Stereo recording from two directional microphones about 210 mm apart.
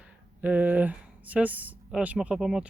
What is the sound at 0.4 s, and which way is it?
Speech, 5° right (ahead or behind).